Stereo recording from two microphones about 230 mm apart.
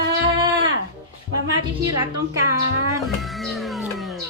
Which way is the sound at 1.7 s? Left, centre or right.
Centre.